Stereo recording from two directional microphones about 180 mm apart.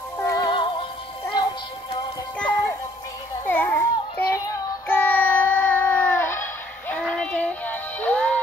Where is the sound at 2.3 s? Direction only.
10° left (ahead or behind).